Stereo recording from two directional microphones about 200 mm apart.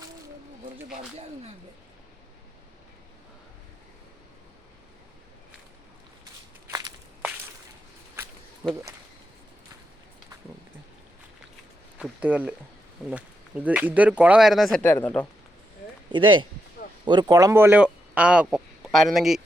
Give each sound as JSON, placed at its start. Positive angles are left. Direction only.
{"t": 6.7, "sound": "walk", "side_deg": -20}
{"t": 11.9, "sound": "speech", "side_deg": -5}
{"t": 16.1, "sound": "speech", "side_deg": -25}